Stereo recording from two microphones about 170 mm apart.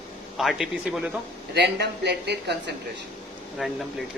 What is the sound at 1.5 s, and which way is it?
Speech, 80° right.